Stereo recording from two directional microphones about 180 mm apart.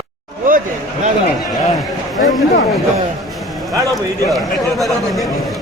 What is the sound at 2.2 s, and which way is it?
Speech, 50° left (ahead or behind).